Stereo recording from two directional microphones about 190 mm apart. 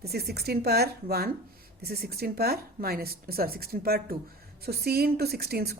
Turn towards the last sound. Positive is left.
turn(degrees=-55)  # may be behind; listen again after turning